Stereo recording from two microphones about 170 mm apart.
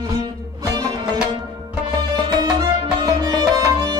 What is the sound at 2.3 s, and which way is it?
Music, 25° right (ahead or behind).